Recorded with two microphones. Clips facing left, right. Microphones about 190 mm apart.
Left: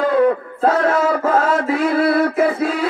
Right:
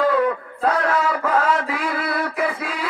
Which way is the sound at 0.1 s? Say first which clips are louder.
Left 5 dB; 30° left (ahead or behind).